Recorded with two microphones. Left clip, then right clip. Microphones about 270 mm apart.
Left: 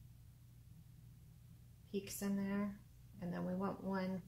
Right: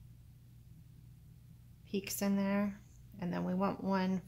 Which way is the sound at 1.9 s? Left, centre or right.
Right.